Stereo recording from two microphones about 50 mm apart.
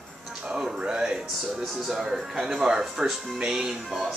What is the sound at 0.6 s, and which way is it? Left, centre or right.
Speech, centre.